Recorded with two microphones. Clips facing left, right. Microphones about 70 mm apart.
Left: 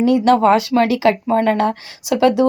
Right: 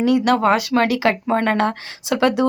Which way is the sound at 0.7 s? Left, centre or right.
Right.